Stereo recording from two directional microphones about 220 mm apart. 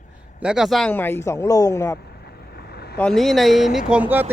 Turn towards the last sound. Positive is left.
turn(degrees=-10)  # may be behind; listen again after turning